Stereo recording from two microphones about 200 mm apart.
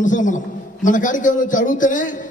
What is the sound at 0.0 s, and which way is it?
A man's voice, 40° left (ahead or behind).